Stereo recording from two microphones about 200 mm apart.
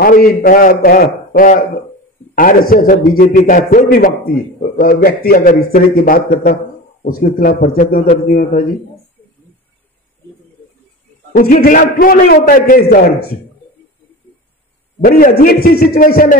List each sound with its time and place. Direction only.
0.0 s a man's voice: 45° left (ahead or behind)
11.3 s a man's voice: 45° left (ahead or behind)
15.0 s a man's voice: 45° left (ahead or behind)